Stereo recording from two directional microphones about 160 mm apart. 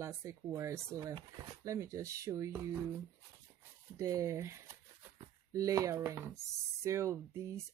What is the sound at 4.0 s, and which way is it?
Speech, 20° right (ahead or behind).